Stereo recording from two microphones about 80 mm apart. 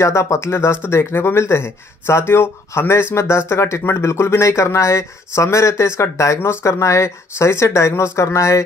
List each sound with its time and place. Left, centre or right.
0.0 s speech: left